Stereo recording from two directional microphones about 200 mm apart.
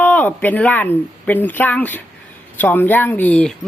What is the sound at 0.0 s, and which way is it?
Speech, 10° left (ahead or behind).